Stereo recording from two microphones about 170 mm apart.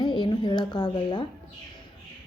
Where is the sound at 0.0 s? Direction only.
25° left (ahead or behind).